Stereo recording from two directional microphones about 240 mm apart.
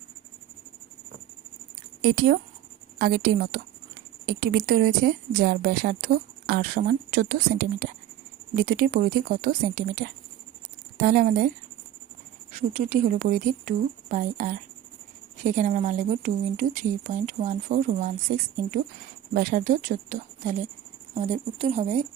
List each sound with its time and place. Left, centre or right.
3.0 s speech: right
12.5 s speech: right